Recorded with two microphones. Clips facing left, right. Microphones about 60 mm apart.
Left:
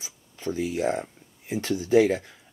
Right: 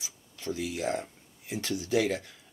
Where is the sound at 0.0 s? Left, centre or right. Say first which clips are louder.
Left 6 dB; left.